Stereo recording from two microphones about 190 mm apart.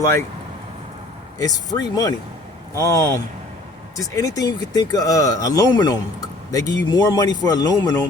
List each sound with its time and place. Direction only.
0.0 s speech: 15° left (ahead or behind)
1.4 s speech: 20° left (ahead or behind)